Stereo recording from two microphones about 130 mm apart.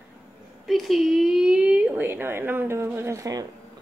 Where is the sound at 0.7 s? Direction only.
Centre (ahead or behind); by 3.4 s 25° right (ahead or behind).